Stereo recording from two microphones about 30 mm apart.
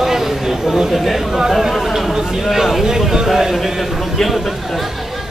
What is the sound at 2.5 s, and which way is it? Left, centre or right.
Speech, centre.